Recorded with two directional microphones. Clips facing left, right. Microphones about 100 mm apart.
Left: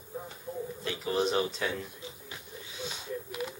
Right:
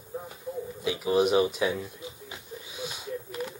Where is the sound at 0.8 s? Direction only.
10° right (ahead or behind).